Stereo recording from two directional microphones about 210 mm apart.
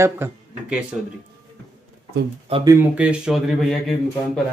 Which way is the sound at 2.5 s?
20° right (ahead or behind).